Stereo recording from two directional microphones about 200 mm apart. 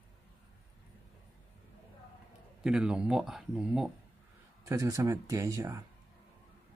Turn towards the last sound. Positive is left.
turn(degrees=-15)  # may be behind; listen again after turning